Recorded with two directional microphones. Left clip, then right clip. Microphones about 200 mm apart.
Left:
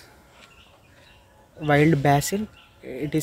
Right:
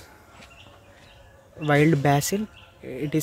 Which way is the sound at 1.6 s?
Centre (ahead or behind).